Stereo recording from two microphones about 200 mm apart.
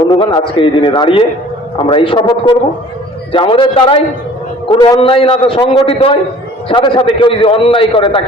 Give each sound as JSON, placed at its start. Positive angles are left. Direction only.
{"t": 0.2, "sound": "a man's voice", "side_deg": 25}